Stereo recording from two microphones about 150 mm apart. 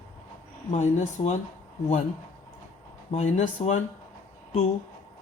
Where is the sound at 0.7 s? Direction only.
50° left (ahead or behind).